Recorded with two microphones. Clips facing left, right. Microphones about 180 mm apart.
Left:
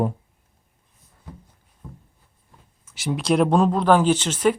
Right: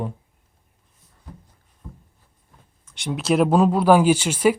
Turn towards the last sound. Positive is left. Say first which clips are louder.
# right 2 dB
turn(degrees=-10)  # may be behind; listen again after turning